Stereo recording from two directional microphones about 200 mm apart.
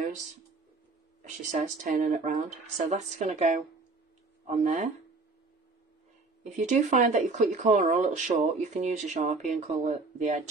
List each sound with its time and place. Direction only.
1.2 s speech: 40° right (ahead or behind)
6.5 s speech: 35° right (ahead or behind)